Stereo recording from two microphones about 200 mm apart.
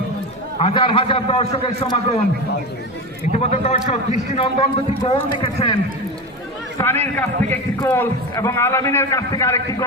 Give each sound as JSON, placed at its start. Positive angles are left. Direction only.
{"t": 0.6, "sound": "a man's voice", "side_deg": 25}
{"t": 3.3, "sound": "a man's voice", "side_deg": 35}
{"t": 6.7, "sound": "a man's voice", "side_deg": 10}